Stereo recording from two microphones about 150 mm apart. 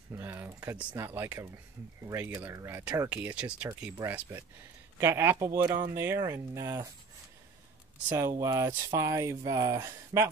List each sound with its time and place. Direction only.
0.1 s speech: 15° right (ahead or behind)
8.1 s speech: 20° right (ahead or behind)